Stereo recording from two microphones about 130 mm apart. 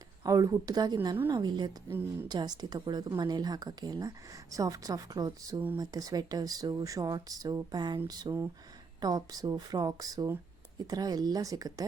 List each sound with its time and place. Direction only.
0.3 s speech: 25° right (ahead or behind)